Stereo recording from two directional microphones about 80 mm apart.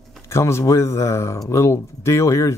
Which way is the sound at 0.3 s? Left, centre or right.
Left.